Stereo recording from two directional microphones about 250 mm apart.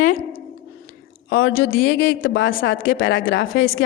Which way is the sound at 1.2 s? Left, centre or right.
Left.